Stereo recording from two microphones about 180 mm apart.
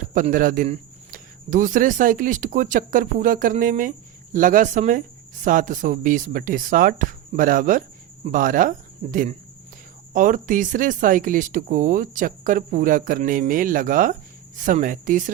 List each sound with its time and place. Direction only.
0.1 s a man's voice: 45° right (ahead or behind)
10.1 s a man's voice: 45° right (ahead or behind)